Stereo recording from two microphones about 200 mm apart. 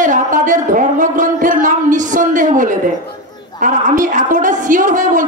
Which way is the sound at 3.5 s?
40° right (ahead or behind).